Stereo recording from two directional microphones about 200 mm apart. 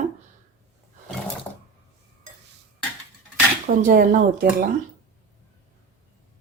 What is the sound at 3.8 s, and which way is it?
Speech, 40° right (ahead or behind).